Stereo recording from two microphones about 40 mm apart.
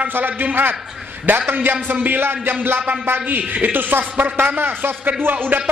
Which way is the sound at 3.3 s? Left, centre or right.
Right.